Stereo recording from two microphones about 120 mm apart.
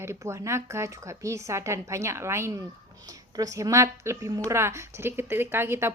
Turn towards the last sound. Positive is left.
turn(degrees=-20)  # may be behind; listen again after turning